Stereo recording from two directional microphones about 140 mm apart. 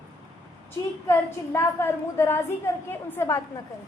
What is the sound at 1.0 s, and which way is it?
A woman's voice, 20° left (ahead or behind).